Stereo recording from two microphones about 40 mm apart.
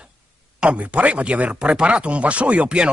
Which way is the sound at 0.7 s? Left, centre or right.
Right.